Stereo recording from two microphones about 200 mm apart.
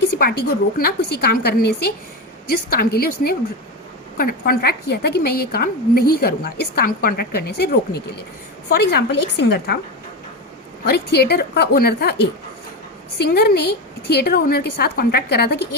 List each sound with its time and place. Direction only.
0.2 s a woman's voice: 50° left (ahead or behind)
4.2 s a woman's voice: 50° left (ahead or behind)
10.8 s a woman's voice: 55° left (ahead or behind)